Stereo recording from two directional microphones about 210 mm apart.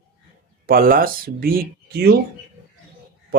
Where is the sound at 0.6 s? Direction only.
45° right (ahead or behind).